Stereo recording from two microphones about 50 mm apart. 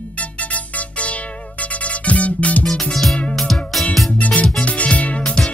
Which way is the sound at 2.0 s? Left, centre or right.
Left.